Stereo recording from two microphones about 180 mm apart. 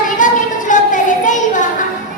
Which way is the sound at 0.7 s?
45° left (ahead or behind).